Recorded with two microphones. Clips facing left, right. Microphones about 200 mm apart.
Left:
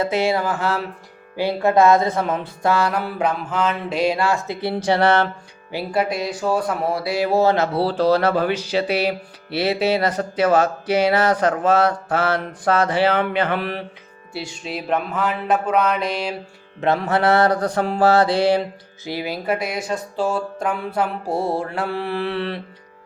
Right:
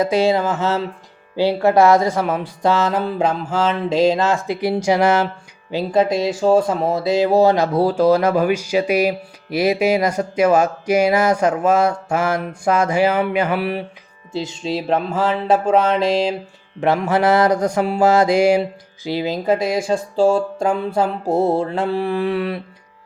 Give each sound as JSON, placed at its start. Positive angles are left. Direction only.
{"t": 0.0, "sound": "speech", "side_deg": 20}
{"t": 0.3, "sound": "music", "side_deg": -20}
{"t": 3.8, "sound": "music", "side_deg": -90}
{"t": 4.1, "sound": "speech", "side_deg": -20}
{"t": 5.7, "sound": "music", "side_deg": -25}
{"t": 7.8, "sound": "speech", "side_deg": -10}
{"t": 14.6, "sound": "music", "side_deg": -30}
{"t": 17.2, "sound": "speech", "side_deg": -10}
{"t": 19.0, "sound": "music", "side_deg": -20}